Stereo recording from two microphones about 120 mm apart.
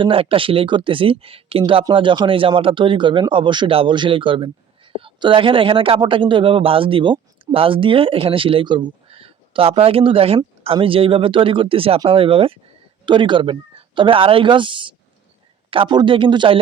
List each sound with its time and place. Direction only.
0.0 s speech: 50° right (ahead or behind)